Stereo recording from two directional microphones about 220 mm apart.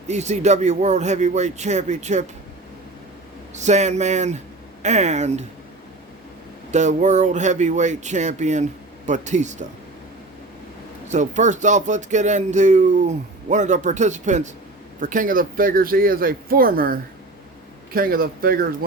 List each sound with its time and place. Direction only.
0.1 s speech: 30° right (ahead or behind)
3.5 s speech: 30° right (ahead or behind)
6.7 s speech: 30° right (ahead or behind)
11.1 s speech: 35° right (ahead or behind)